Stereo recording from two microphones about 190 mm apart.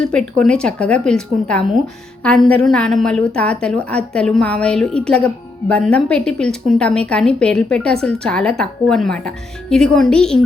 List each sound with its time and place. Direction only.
0.0 s a woman's voice: 5° left (ahead or behind)